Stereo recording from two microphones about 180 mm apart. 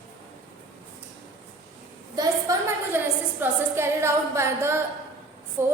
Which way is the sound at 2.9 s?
10° right (ahead or behind).